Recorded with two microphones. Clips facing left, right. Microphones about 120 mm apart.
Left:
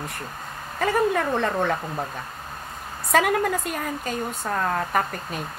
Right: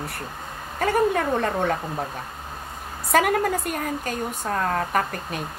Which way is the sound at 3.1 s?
45° right (ahead or behind).